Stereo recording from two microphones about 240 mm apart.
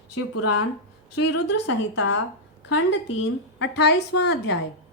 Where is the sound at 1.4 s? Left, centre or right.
Left.